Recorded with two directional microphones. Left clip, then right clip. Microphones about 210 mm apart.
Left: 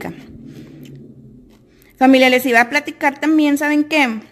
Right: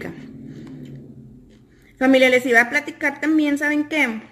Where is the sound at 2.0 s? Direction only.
50° left (ahead or behind).